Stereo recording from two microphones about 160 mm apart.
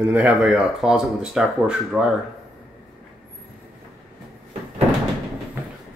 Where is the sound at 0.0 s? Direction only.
10° right (ahead or behind).